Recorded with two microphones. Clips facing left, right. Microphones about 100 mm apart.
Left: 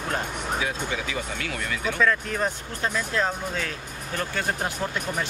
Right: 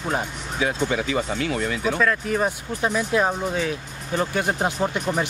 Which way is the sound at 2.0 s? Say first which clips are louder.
Even; 5° right (ahead or behind).